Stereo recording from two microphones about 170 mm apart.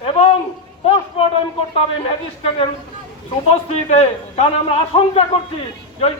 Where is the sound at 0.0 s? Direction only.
35° left (ahead or behind).